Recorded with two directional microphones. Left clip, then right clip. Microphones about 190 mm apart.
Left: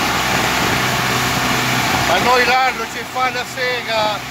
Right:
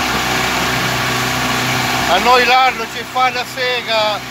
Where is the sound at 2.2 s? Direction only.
20° right (ahead or behind).